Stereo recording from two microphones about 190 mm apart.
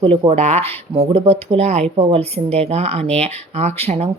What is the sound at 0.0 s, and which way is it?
Speech, 30° right (ahead or behind).